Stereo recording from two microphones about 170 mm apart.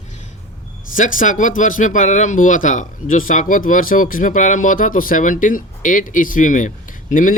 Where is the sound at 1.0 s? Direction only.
50° left (ahead or behind).